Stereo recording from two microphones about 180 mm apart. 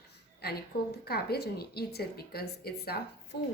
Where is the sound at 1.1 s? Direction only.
60° left (ahead or behind).